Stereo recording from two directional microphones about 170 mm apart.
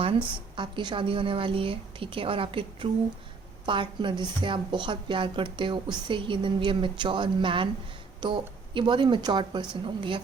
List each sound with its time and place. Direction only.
0.5 s a woman's voice: 30° right (ahead or behind)